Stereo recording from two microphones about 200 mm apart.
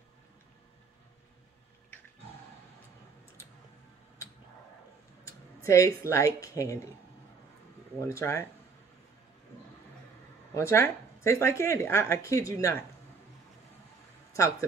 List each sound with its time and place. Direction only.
5.2 s speech: 15° left (ahead or behind)
8.1 s speech: 15° left (ahead or behind)
10.5 s speech: 15° left (ahead or behind)
14.3 s speech: 15° left (ahead or behind)